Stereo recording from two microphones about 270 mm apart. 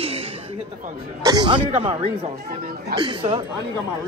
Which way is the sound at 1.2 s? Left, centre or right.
Centre.